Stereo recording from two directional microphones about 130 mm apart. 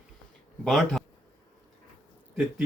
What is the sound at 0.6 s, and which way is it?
Speech, centre (ahead or behind).